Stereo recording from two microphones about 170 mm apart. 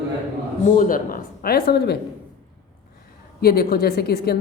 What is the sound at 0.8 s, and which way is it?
Speech, 55° left (ahead or behind).